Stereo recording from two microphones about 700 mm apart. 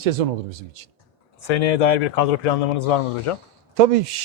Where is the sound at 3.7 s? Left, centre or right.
Right.